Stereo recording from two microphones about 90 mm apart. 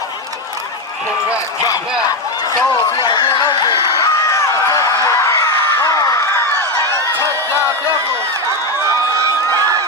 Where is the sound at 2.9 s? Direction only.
55° left (ahead or behind).